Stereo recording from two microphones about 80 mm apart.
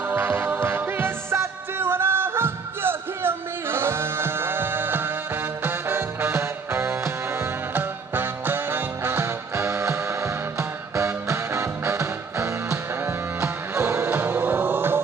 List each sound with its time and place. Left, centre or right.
0.1 s music: right